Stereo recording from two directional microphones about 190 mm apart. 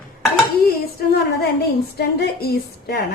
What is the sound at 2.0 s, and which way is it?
Speech, 55° left (ahead or behind).